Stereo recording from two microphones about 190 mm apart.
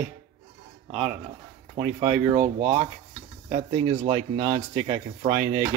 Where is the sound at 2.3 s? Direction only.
35° right (ahead or behind).